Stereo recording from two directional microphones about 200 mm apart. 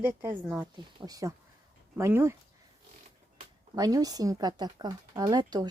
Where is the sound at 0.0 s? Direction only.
10° right (ahead or behind).